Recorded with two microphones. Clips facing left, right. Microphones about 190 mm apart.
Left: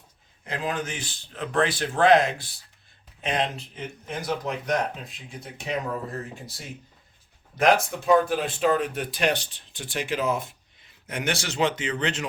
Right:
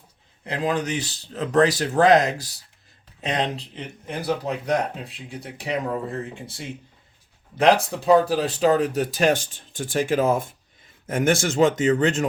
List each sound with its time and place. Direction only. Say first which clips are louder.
0.4 s speech: right 5 dB; 35° right (ahead or behind)